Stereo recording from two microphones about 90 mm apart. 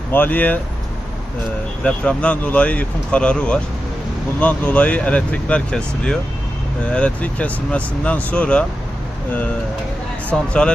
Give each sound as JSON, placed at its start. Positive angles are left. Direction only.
{"t": 0.1, "sound": "speech", "side_deg": 20}
{"t": 1.8, "sound": "speech", "side_deg": 15}
{"t": 10.2, "sound": "speech", "side_deg": 10}